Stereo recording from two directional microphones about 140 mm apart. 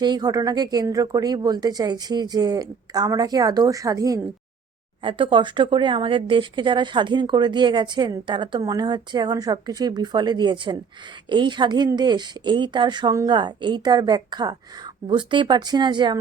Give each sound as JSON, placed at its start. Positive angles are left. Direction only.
{"t": 0.0, "sound": "speech", "side_deg": -30}
{"t": 5.0, "sound": "speech", "side_deg": -35}